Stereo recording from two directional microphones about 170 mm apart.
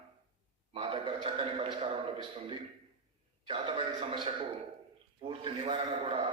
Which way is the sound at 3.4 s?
30° right (ahead or behind).